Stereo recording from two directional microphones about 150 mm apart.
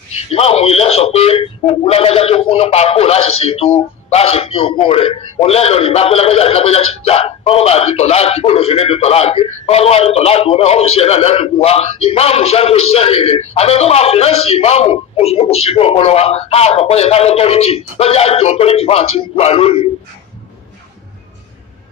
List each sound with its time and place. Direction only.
0.3 s a man's voice: 40° left (ahead or behind)